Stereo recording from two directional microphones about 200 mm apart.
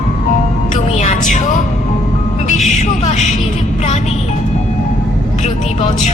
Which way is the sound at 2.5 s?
35° left (ahead or behind).